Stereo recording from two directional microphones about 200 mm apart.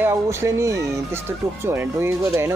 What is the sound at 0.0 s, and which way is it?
Speech, 15° right (ahead or behind).